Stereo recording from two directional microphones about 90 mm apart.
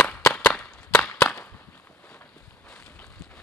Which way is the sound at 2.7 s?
10° left (ahead or behind).